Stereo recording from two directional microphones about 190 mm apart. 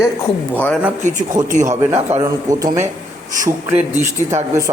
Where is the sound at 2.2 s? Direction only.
20° right (ahead or behind).